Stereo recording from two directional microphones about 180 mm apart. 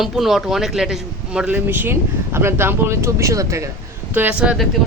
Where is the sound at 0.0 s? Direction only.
Centre (ahead or behind).